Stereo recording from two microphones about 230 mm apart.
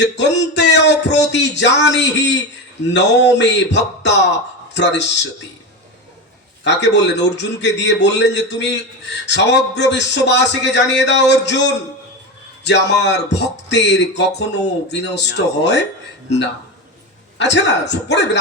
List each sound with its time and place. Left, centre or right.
0.0 s speech: left
6.7 s speech: left
17.3 s speech: left